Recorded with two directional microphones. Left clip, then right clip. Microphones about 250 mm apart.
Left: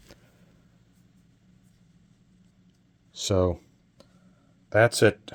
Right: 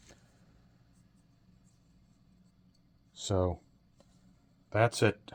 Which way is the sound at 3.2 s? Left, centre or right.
Left.